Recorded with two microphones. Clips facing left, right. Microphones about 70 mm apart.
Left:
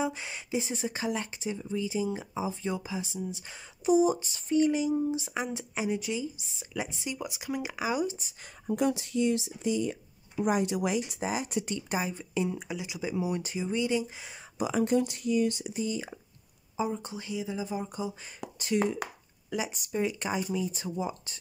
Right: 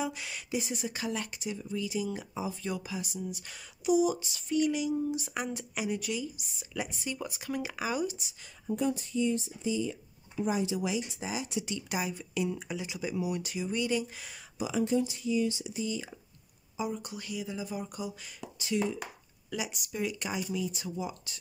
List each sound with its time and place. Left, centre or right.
0.0 s speech: left
3.9 s speech: left
8.2 s speech: left
8.7 s speech: left
12.5 s speech: centre
13.0 s speech: left
14.6 s speech: left
18.4 s speech: left
19.5 s speech: left